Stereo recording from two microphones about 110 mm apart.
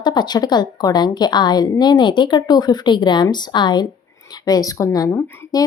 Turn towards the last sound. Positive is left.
turn(degrees=20)  # may be behind; listen again after turning